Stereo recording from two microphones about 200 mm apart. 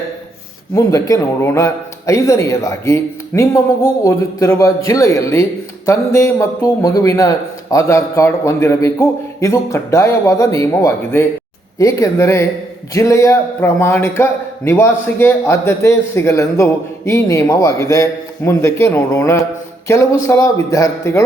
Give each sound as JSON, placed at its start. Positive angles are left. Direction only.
{"t": 0.8, "sound": "a man's voice", "side_deg": 15}